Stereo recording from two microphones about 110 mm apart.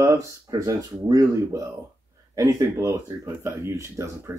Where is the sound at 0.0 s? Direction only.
30° right (ahead or behind).